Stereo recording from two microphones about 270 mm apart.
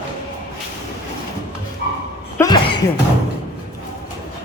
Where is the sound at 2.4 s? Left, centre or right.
Centre.